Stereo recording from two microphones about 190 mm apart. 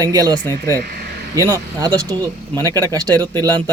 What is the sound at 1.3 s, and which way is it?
A man's voice, 20° right (ahead or behind).